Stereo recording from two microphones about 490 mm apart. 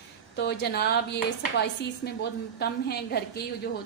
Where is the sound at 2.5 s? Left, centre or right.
Centre.